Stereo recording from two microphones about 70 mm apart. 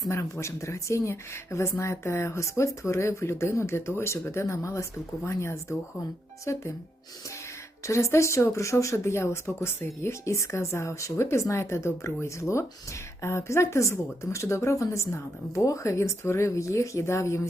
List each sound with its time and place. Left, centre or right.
0.1 s speech: left
7.9 s speech: left